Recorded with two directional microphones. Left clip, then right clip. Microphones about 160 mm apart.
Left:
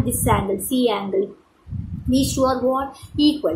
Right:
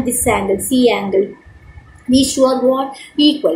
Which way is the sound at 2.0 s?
15° left (ahead or behind).